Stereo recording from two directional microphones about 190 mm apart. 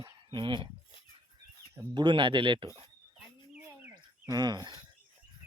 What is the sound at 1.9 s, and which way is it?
Speech, 25° right (ahead or behind).